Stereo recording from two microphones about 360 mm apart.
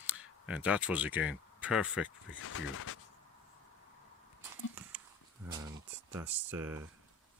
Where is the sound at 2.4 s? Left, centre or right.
Left.